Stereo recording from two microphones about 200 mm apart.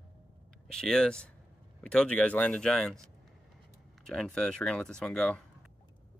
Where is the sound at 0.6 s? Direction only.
5° left (ahead or behind).